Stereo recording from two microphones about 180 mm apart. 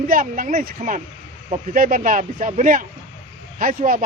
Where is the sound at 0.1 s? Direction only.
50° right (ahead or behind).